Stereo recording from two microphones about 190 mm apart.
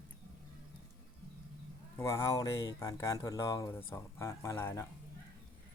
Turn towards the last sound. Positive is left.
turn(degrees=10)  # may be behind; listen again after turning